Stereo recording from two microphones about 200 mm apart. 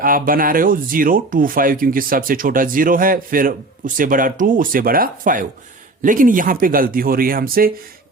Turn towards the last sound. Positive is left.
turn(degrees=-45)  # may be behind; listen again after turning